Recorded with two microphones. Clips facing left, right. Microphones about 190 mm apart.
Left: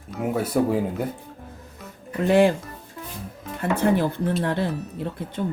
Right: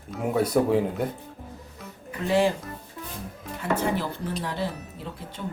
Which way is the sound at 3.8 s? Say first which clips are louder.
Left 6 dB; 60° left (ahead or behind).